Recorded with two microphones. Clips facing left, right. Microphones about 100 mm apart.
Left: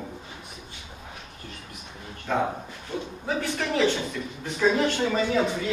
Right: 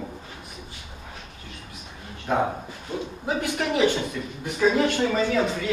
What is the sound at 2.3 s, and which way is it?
Speech, 15° right (ahead or behind).